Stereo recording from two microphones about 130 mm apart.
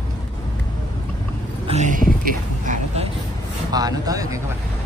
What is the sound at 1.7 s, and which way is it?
Speech, 70° right (ahead or behind).